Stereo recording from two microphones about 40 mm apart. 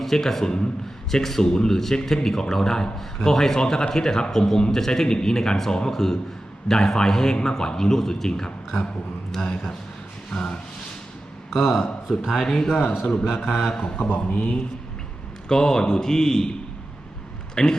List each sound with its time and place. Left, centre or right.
0.0 s a man's voice: centre
10.3 s speech: left
11.5 s a man's voice: centre
13.9 s speech: left
15.4 s a man's voice: centre